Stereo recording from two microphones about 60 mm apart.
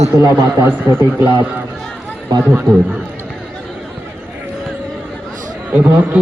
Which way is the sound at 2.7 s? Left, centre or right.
Right.